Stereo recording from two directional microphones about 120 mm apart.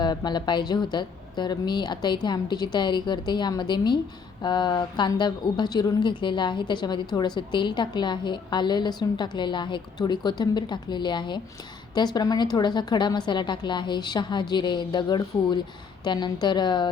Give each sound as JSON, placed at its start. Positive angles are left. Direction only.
{"t": 0.0, "sound": "a woman's voice", "side_deg": 35}